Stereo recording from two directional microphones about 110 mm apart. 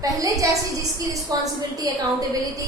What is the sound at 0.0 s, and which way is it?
A woman's voice, 30° right (ahead or behind).